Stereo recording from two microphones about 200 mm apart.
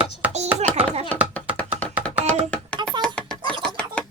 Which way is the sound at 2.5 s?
5° left (ahead or behind).